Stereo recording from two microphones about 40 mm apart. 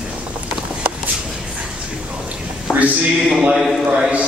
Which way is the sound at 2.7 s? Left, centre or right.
Left.